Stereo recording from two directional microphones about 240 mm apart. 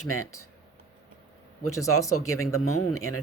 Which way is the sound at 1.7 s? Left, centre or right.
Centre.